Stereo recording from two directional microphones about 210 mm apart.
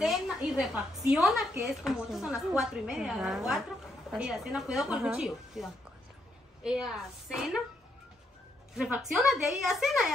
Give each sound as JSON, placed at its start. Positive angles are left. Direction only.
{"t": 0.0, "sound": "a woman's voice", "side_deg": 0}
{"t": 8.7, "sound": "a woman's voice", "side_deg": -5}